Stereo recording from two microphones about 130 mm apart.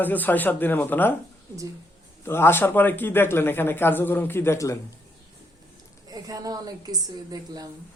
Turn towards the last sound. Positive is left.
turn(degrees=-30)  # may be behind; listen again after turning